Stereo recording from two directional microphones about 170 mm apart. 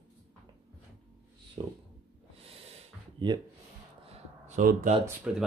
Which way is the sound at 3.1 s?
25° right (ahead or behind).